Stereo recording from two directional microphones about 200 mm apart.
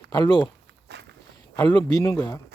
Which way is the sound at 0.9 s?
60° right (ahead or behind).